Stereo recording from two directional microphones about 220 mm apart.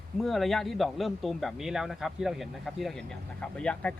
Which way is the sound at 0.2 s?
Centre (ahead or behind).